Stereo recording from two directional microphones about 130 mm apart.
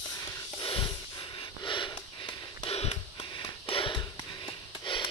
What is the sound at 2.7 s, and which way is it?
Music, 50° left (ahead or behind).